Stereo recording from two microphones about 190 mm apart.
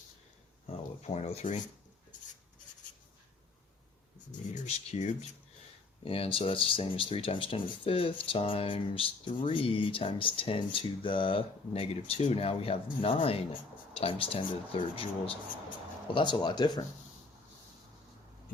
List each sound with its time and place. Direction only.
1.0 s speech: 35° left (ahead or behind)
4.3 s speech: 40° left (ahead or behind); by 16.8 s 25° left (ahead or behind)